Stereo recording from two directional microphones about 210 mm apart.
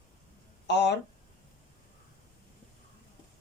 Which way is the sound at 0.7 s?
55° left (ahead or behind).